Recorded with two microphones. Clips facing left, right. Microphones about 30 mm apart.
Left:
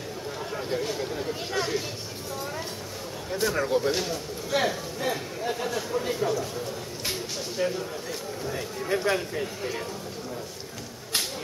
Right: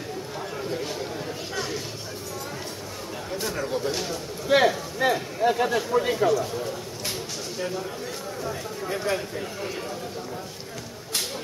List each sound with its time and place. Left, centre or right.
0.7 s a sound: centre
3.3 s a man's voice: centre
4.6 s a man's voice: right
7.5 s speech: centre
8.8 s a man's voice: centre